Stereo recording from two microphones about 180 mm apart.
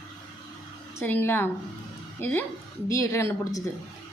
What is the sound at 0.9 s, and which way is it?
A woman's voice, 10° left (ahead or behind).